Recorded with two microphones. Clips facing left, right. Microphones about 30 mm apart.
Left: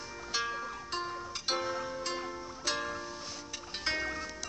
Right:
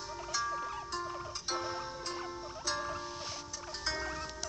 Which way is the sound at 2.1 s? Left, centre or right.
Left.